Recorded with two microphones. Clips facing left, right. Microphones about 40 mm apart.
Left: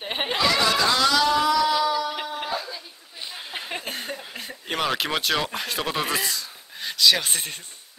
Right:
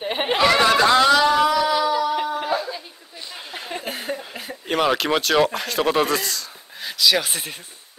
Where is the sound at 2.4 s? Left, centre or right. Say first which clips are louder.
Right 6 dB; centre.